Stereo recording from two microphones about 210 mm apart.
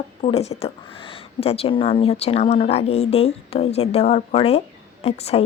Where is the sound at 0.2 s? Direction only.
30° left (ahead or behind).